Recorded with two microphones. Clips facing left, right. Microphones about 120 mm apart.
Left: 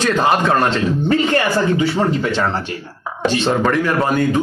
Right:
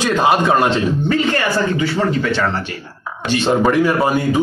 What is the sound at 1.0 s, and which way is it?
Speech, 25° left (ahead or behind).